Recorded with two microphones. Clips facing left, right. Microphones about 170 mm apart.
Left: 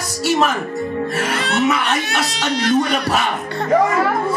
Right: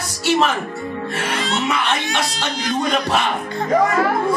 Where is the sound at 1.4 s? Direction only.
65° left (ahead or behind).